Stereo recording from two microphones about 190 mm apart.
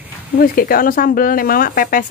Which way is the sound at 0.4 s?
50° left (ahead or behind).